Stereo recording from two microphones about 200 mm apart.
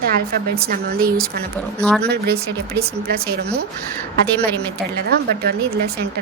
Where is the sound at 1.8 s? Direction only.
5° left (ahead or behind).